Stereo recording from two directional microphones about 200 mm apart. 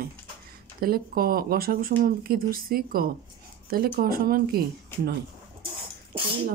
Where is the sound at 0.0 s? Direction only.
50° right (ahead or behind).